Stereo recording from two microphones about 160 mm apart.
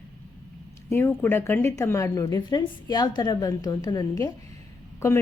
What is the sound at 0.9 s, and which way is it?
A woman's voice, 15° left (ahead or behind).